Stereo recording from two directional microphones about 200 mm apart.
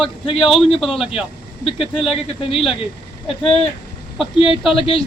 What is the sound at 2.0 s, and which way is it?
Speech, 30° left (ahead or behind).